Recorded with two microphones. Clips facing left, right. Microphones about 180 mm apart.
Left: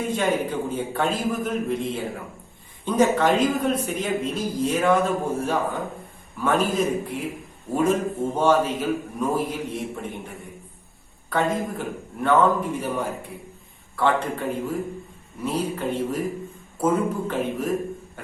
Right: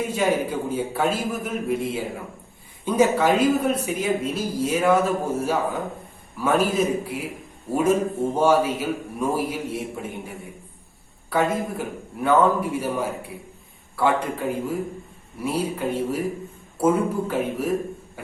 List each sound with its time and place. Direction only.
0.1 s speech: 10° right (ahead or behind)